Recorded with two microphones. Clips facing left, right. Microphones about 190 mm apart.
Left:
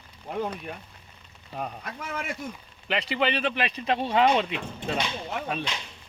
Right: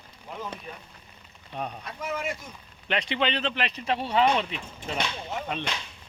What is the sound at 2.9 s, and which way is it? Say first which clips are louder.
Speech: left 1 dB; 5° left (ahead or behind).